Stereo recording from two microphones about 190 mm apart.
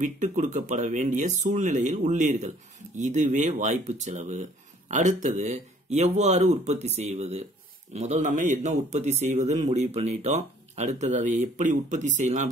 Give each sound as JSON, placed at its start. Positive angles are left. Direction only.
{"t": 0.0, "sound": "speech", "side_deg": -40}